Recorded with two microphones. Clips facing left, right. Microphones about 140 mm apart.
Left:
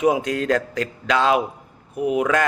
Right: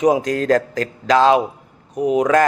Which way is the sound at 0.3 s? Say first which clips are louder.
Right 4 dB; 40° right (ahead or behind).